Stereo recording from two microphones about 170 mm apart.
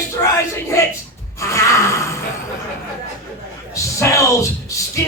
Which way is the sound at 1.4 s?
15° left (ahead or behind).